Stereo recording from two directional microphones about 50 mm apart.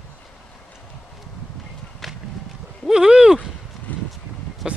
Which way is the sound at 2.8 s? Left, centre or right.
Centre.